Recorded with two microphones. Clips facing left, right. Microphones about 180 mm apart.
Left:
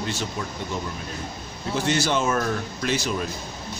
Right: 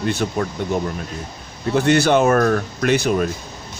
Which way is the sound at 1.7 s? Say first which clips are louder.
Right 8 dB; 60° right (ahead or behind).